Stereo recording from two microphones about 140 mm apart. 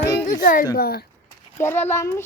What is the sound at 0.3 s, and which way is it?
Speech, 75° left (ahead or behind).